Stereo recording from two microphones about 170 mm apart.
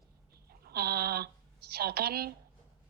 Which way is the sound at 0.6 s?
65° right (ahead or behind).